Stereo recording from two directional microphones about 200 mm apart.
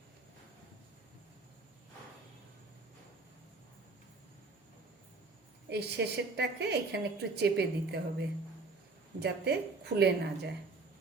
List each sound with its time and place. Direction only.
5.6 s a woman's voice: 55° right (ahead or behind)
9.2 s a woman's voice: 55° right (ahead or behind)